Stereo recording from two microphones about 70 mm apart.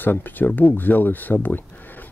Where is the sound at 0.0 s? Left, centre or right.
Left.